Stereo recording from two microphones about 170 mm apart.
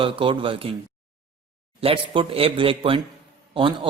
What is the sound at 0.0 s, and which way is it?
Speech, 30° right (ahead or behind).